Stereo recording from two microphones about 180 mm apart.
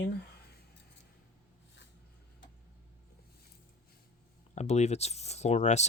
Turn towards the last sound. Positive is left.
turn(degrees=40)  # may be behind; listen again after turning